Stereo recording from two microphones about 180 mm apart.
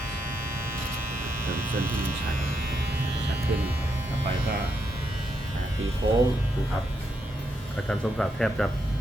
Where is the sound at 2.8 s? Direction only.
65° right (ahead or behind).